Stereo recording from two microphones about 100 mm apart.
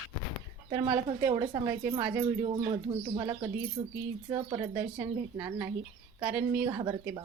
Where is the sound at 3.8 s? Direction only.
65° right (ahead or behind).